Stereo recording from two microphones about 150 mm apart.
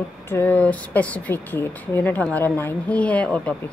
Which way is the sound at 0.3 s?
10° left (ahead or behind).